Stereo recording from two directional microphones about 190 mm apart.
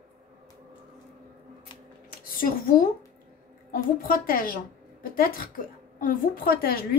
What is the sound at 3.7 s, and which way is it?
A woman's voice, 50° left (ahead or behind).